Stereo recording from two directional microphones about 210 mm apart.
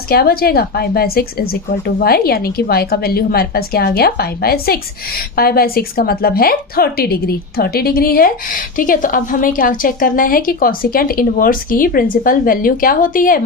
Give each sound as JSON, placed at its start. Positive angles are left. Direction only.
{"t": 0.1, "sound": "a woman's voice", "side_deg": 45}